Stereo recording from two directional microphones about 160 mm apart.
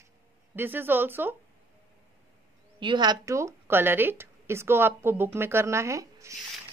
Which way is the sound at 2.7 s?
30° right (ahead or behind).